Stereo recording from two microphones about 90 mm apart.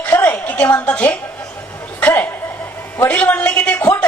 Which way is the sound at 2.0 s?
20° left (ahead or behind).